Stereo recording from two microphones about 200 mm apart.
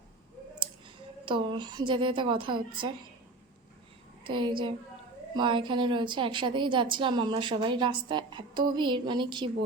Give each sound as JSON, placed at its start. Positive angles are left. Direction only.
{"t": 1.2, "sound": "a woman's voice", "side_deg": -25}
{"t": 4.2, "sound": "a woman's voice", "side_deg": -25}